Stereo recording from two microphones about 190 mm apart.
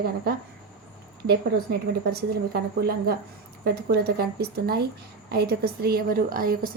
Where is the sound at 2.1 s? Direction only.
55° right (ahead or behind).